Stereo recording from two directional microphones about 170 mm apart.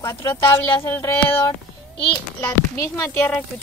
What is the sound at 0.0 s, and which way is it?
Speech, 20° left (ahead or behind).